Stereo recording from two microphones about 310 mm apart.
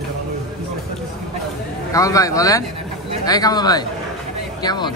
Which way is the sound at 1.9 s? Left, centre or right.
Centre.